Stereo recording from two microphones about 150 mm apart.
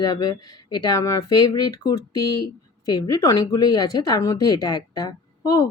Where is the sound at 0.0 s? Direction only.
25° left (ahead or behind).